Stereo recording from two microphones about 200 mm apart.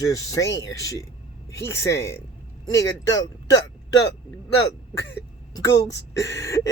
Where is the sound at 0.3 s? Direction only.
15° left (ahead or behind).